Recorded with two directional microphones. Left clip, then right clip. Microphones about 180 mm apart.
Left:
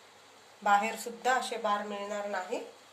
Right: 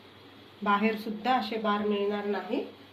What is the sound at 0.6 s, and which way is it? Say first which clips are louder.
Speech: even; 60° left (ahead or behind).